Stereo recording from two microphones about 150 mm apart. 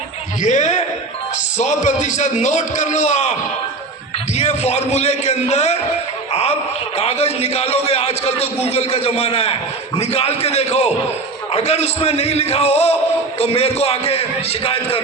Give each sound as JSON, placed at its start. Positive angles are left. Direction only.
{"t": 0.4, "sound": "a man's voice", "side_deg": 50}
{"t": 4.4, "sound": "a man's voice", "side_deg": 45}